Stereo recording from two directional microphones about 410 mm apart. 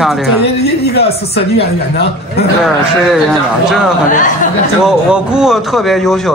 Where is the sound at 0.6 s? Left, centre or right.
Left.